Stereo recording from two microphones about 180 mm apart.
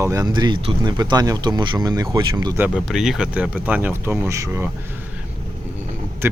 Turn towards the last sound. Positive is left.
turn(degrees=-15)  # may be behind; listen again after turning